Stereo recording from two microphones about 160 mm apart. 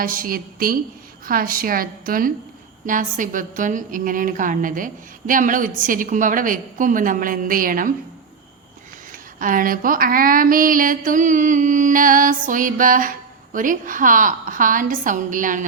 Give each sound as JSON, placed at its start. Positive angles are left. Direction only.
{"t": 0.0, "sound": "speech", "side_deg": -60}
{"t": 9.1, "sound": "speech", "side_deg": -60}